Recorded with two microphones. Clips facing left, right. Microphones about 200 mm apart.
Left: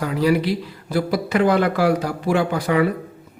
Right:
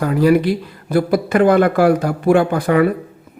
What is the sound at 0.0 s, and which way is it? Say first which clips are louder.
Speech: right 5 dB; 50° right (ahead or behind).